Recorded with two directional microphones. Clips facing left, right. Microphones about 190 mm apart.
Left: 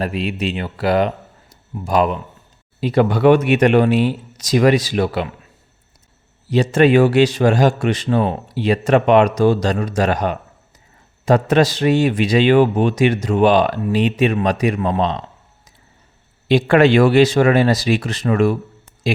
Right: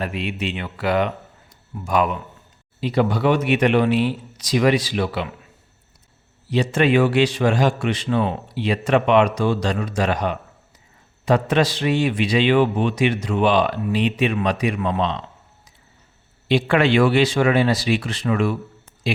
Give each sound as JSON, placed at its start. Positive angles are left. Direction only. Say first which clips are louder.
{"t": 0.0, "sound": "a man's voice", "louder": "left 4 dB", "side_deg": 35}
{"t": 2.8, "sound": "a man's voice", "louder": "left 5 dB", "side_deg": 55}
{"t": 6.5, "sound": "a man's voice", "louder": "left 5 dB", "side_deg": 40}
{"t": 16.5, "sound": "a man's voice", "louder": "left 5 dB", "side_deg": 40}